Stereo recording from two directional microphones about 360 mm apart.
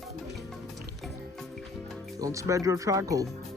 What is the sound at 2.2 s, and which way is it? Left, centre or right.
Speech, centre.